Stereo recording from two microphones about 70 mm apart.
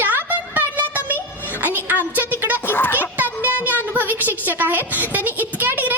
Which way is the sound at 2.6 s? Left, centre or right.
Left.